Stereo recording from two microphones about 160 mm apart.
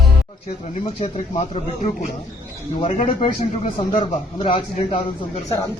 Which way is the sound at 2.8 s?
35° left (ahead or behind).